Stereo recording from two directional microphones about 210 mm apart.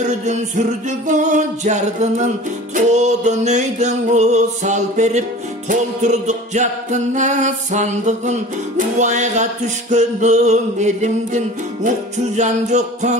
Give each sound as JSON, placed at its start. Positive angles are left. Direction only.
{"t": 0.2, "sound": "music", "side_deg": -35}